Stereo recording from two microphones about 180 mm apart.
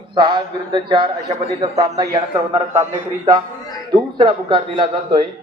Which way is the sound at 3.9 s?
25° right (ahead or behind).